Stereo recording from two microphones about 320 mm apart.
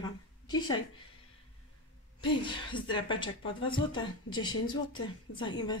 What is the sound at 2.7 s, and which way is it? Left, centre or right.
A woman's voice, centre.